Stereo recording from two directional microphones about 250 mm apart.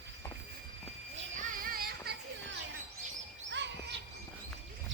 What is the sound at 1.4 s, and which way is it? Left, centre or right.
Music, right.